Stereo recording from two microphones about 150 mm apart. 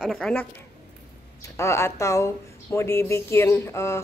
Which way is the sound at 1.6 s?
20° left (ahead or behind).